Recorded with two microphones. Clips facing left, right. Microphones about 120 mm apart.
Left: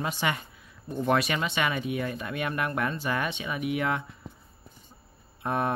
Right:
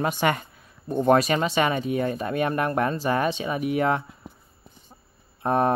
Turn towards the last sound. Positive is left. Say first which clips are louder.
# right 6 dB
turn(degrees=-40)  # may be behind; listen again after turning